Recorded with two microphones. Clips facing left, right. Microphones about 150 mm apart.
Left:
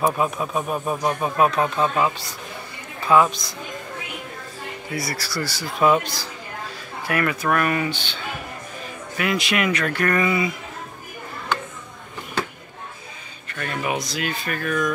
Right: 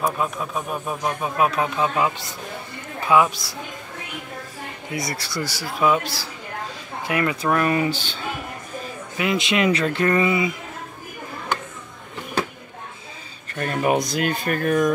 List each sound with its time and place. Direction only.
0.0 s speech: 5° left (ahead or behind); by 3.5 s 10° right (ahead or behind)
4.9 s speech: 20° right (ahead or behind)
5.8 s speech: 5° right (ahead or behind)
7.0 s speech: 20° right (ahead or behind)
7.9 s speech: 40° right (ahead or behind)
9.1 s speech: 20° right (ahead or behind)
13.6 s speech: 40° right (ahead or behind)
13.9 s speech: 55° right (ahead or behind); by 14.9 s 40° right (ahead or behind)